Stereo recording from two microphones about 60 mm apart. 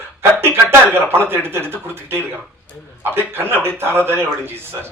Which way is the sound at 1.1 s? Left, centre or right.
Right.